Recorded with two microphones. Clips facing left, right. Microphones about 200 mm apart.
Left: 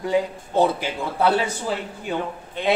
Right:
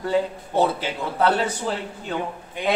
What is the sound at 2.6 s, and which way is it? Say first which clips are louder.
Speech: left 2 dB; 15° right (ahead or behind).